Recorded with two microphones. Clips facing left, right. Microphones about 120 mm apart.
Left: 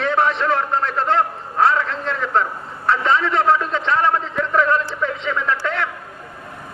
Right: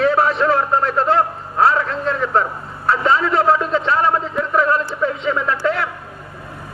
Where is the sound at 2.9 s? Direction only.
30° right (ahead or behind).